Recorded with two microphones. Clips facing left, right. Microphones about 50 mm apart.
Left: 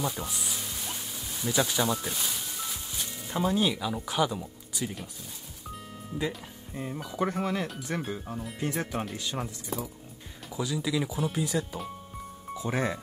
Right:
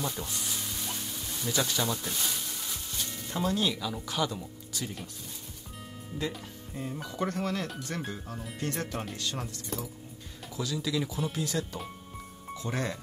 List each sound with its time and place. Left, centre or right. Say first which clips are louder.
0.0 s music: left 2 dB; centre
6.7 s speech: left 1 dB; centre